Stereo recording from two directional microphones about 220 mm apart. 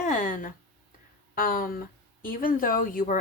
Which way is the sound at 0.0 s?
35° left (ahead or behind).